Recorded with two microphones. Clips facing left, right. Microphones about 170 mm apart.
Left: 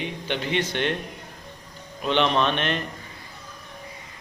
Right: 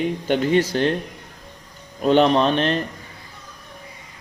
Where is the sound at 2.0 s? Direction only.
40° right (ahead or behind).